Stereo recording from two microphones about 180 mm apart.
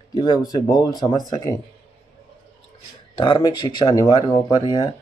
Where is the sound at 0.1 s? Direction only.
20° left (ahead or behind).